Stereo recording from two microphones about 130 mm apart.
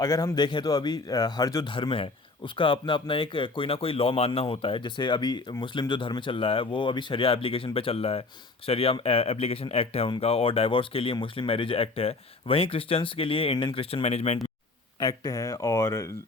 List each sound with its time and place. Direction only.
0.0 s speech: 25° left (ahead or behind)
1.7 s speech: 40° left (ahead or behind)
14.9 s speech: 30° left (ahead or behind)